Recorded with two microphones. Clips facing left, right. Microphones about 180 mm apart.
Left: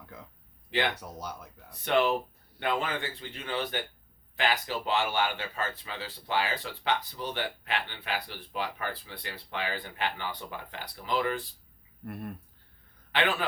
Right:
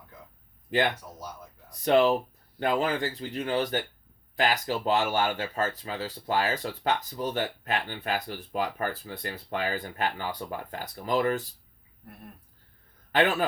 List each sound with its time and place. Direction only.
1.7 s speech: 35° right (ahead or behind)
12.0 s speech: 75° left (ahead or behind)
13.1 s a sound: 40° right (ahead or behind)